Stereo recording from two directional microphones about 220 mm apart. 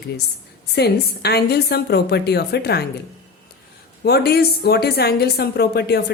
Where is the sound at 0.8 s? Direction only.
50° left (ahead or behind).